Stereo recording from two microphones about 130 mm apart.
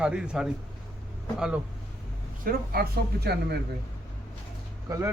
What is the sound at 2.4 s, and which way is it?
Speech, 90° right.